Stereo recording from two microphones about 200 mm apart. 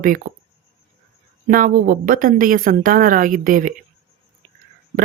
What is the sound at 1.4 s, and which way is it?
A man's voice, 45° right (ahead or behind).